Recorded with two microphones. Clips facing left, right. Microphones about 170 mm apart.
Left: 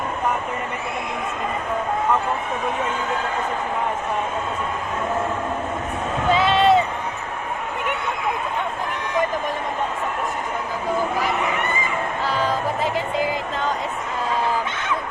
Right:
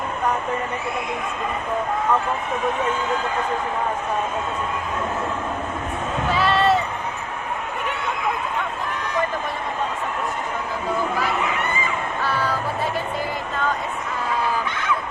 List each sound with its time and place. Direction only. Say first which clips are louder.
6.3 s run: left 2 dB; 20° left (ahead or behind)
12.3 s music: left 2 dB; 20° left (ahead or behind)